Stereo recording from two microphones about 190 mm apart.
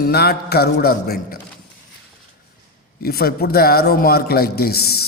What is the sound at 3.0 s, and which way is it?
A man's voice, 55° left (ahead or behind).